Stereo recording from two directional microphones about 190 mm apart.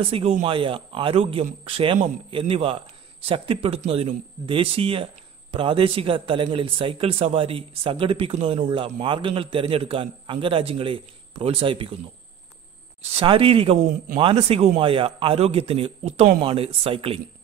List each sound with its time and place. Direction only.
0.0 s speech: 30° right (ahead or behind)
13.1 s a man's voice: 30° right (ahead or behind)